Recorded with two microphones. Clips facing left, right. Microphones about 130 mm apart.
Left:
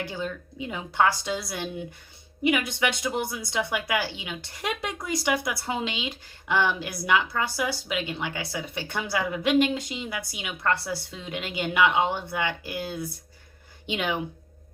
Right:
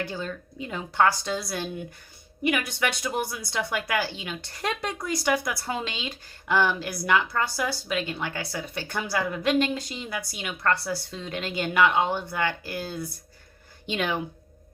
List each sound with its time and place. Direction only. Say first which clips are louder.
0.0 s a woman's voice: even; 15° left (ahead or behind)